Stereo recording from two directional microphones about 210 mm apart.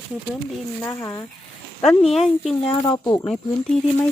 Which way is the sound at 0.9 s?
10° left (ahead or behind).